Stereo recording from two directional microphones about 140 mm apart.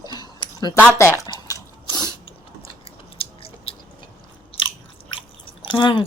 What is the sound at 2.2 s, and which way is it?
Chewing, 45° left (ahead or behind).